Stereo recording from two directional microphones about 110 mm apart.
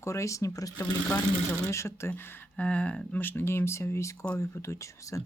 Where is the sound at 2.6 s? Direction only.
10° left (ahead or behind); by 5.2 s 30° left (ahead or behind).